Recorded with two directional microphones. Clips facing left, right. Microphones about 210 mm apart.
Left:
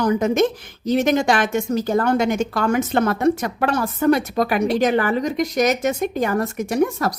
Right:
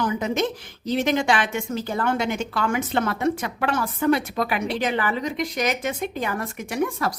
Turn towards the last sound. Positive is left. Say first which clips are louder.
# left 5 dB
turn(degrees=40)  # may be behind; listen again after turning